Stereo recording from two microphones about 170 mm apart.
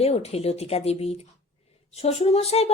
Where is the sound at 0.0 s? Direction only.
40° left (ahead or behind).